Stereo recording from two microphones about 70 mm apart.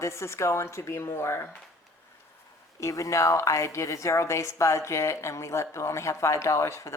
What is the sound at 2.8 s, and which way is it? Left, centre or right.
Speech, left.